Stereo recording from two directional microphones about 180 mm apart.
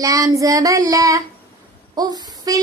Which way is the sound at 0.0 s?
20° right (ahead or behind).